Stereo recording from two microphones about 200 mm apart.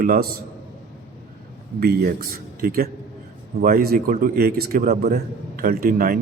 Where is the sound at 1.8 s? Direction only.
50° right (ahead or behind).